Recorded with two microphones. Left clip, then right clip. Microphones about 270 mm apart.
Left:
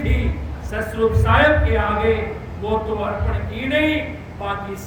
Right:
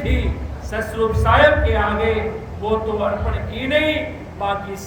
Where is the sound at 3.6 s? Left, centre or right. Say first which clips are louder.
Right 1 dB; centre.